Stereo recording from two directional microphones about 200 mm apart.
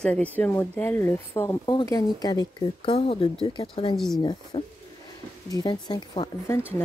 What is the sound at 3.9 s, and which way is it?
Speech, centre (ahead or behind).